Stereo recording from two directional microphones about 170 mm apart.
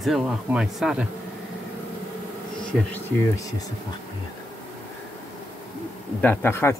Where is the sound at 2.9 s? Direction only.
20° left (ahead or behind).